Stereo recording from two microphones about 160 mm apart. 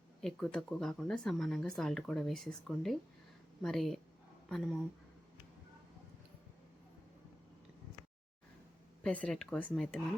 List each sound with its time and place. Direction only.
0.2 s speech: 5° left (ahead or behind)
9.0 s speech: 5° left (ahead or behind)